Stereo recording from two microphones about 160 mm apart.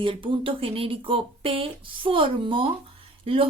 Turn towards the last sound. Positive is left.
turn(degrees=-35)  # may be behind; listen again after turning